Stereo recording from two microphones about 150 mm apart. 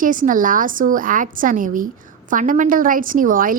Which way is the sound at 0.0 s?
65° right (ahead or behind).